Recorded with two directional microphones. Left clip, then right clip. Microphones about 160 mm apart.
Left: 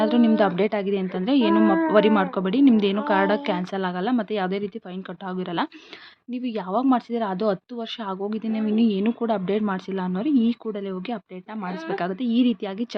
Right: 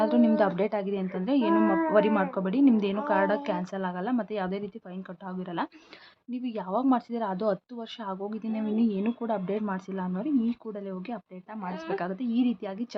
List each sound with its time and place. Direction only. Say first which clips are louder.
0.0 s speech: left 4 dB; 25° left (ahead or behind)
6.3 s speech: left 5 dB; 25° left (ahead or behind)
11.6 s speech: left 4 dB; 55° left (ahead or behind)
11.9 s speech: left 7 dB; 30° left (ahead or behind)